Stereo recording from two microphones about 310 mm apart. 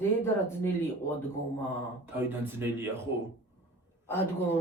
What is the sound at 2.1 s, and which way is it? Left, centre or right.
Speech, centre.